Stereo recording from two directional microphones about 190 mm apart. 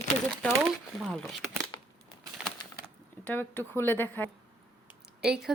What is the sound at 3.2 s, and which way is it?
Speech, 10° left (ahead or behind).